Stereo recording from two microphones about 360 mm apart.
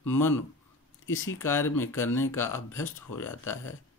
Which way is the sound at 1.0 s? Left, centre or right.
Left.